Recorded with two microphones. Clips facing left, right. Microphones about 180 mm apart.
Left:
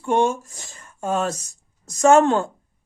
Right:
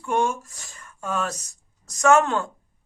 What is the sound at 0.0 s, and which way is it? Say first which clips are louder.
Speech: left 4 dB; 25° left (ahead or behind).